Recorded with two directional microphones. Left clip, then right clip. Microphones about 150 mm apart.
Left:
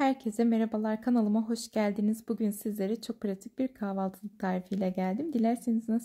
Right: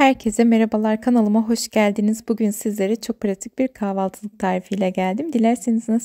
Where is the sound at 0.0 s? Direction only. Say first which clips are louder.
Right 12 dB; 60° right (ahead or behind).